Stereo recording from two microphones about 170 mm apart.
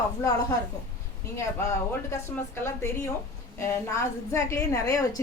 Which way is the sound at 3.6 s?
15° left (ahead or behind).